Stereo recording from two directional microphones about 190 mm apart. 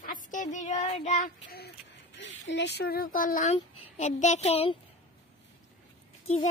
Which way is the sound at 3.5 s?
35° left (ahead or behind).